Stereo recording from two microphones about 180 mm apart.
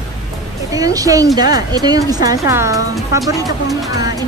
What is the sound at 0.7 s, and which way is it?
A woman's voice, 20° right (ahead or behind).